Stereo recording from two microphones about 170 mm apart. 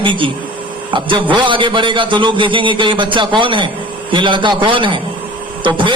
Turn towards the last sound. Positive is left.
turn(degrees=-30)  # may be behind; listen again after turning